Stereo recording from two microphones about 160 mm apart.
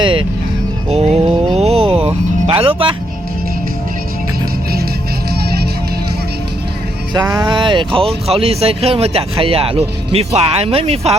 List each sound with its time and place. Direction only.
0.0 s speech: 35° right (ahead or behind)
1.5 s music: 40° right (ahead or behind)
7.1 s speech: 20° right (ahead or behind); by 11.2 s 40° right (ahead or behind)